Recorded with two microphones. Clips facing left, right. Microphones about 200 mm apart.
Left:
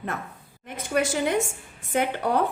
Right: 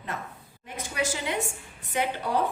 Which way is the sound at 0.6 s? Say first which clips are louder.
Left 5 dB; 55° left (ahead or behind).